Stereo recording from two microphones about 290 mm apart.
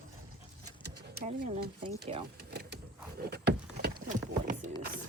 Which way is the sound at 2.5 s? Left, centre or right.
Right.